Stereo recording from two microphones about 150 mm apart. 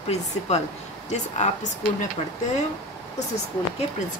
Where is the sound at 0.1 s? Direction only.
45° left (ahead or behind).